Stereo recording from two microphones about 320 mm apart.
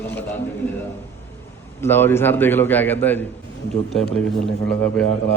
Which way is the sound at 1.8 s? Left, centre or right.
Centre.